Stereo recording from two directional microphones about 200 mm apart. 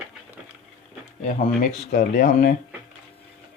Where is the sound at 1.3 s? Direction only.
45° left (ahead or behind).